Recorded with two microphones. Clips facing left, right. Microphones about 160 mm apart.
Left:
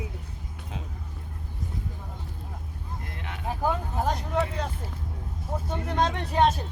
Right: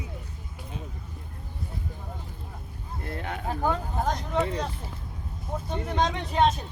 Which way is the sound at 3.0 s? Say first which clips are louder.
Right 9 dB; 40° right (ahead or behind).